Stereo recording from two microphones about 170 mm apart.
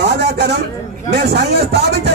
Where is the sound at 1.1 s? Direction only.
70° right (ahead or behind).